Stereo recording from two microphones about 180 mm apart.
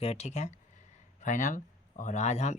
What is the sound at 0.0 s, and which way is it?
Speech, 35° left (ahead or behind).